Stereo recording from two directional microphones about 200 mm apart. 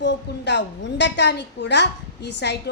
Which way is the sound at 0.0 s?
60° left (ahead or behind).